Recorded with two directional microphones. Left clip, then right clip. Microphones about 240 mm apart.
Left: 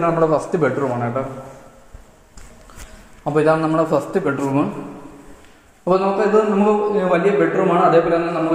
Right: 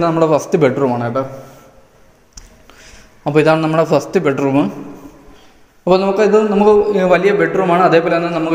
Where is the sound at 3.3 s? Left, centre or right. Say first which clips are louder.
Right 4 dB; right.